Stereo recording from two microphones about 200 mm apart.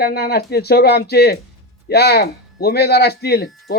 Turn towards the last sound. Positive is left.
turn(degrees=55)  # may be behind; listen again after turning